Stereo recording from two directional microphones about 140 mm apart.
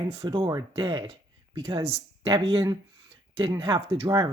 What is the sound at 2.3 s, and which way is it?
Speech, 30° right (ahead or behind).